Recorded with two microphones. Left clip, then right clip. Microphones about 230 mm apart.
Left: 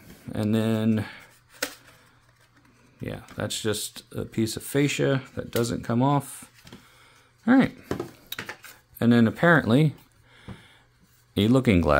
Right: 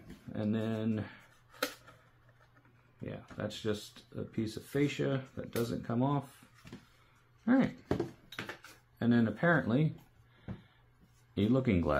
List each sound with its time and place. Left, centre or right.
0.3 s speech: left
3.0 s speech: left
7.4 s speech: left
8.3 s dishes: left
8.9 s speech: left
11.3 s speech: left